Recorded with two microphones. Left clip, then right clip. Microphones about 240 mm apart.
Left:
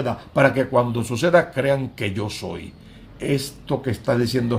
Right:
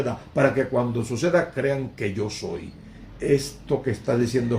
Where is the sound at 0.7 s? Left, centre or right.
Left.